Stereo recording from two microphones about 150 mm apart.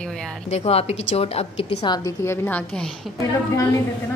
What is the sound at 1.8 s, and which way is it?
Speech, 30° left (ahead or behind).